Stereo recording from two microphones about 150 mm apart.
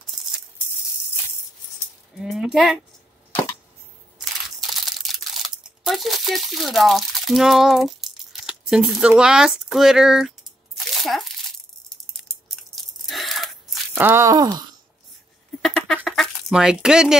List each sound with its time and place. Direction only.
2.1 s speech: 5° right (ahead or behind)
4.2 s crumpling: centre (ahead or behind)
11.0 s a child's voice: centre (ahead or behind)
12.3 s crunch: centre (ahead or behind)
13.9 s speech: 15° right (ahead or behind)
16.0 s a sound: centre (ahead or behind)